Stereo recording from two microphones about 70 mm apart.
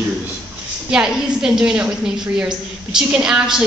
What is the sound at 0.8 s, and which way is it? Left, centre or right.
A woman's voice, centre.